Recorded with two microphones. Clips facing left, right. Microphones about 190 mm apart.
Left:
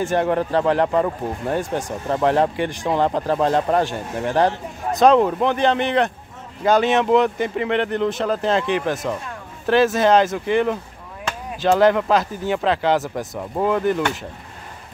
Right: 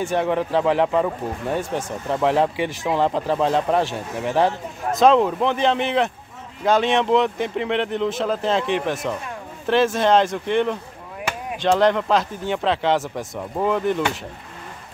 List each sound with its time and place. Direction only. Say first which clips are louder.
0.0 s speech: left 2 dB; centre (ahead or behind)